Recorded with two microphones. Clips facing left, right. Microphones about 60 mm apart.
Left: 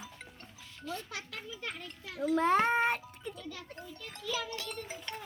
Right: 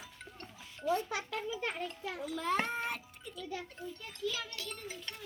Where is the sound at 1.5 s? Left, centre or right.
Right.